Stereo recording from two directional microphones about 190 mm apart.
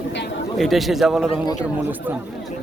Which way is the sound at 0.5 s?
Centre (ahead or behind).